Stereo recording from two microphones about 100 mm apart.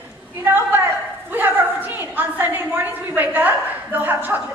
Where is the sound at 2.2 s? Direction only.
15° right (ahead or behind).